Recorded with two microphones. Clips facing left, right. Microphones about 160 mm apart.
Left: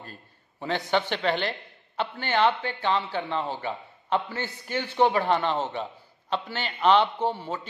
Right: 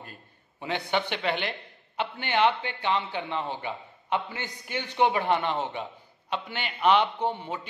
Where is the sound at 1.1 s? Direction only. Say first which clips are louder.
Left 3 dB; 15° right (ahead or behind).